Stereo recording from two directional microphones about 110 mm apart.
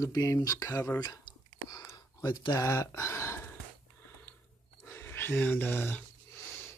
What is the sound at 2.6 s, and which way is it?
Speech, 25° left (ahead or behind).